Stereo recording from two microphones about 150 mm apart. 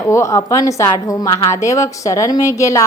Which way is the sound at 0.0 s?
20° left (ahead or behind).